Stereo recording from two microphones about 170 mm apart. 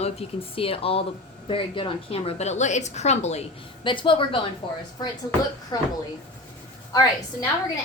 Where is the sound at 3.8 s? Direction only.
30° left (ahead or behind).